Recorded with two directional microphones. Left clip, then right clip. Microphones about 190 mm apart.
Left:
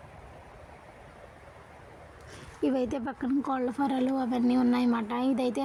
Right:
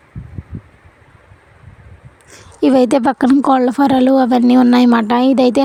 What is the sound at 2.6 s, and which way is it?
A woman's voice, 55° right (ahead or behind).